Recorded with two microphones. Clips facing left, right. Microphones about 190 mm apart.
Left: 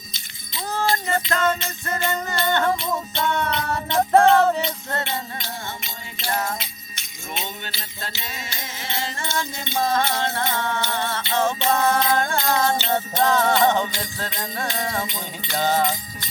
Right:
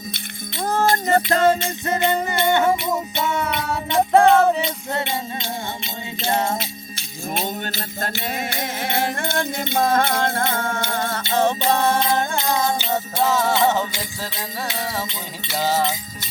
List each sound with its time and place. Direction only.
0.1 s music: 55° right (ahead or behind); by 1.5 s 35° right (ahead or behind)
1.9 s music: 15° right (ahead or behind)
6.2 s jingle bell: 25° right (ahead or behind)
7.3 s music: 45° right (ahead or behind); by 15.8 s 5° right (ahead or behind)